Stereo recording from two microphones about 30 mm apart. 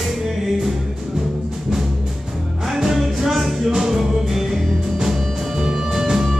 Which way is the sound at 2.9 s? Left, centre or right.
Centre.